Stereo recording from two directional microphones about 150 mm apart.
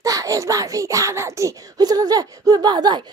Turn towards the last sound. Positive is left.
turn(degrees=-30)  # may be behind; listen again after turning